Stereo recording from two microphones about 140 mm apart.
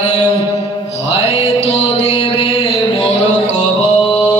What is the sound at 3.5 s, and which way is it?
Music, 55° left (ahead or behind).